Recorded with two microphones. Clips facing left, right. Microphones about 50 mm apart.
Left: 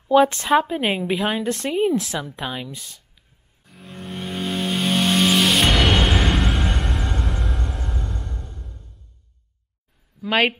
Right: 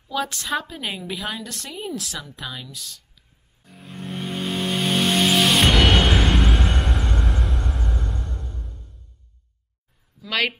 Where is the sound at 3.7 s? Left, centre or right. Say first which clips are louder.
Right 1 dB; centre.